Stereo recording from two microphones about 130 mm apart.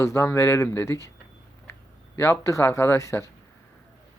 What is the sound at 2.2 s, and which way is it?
Speech, 20° left (ahead or behind).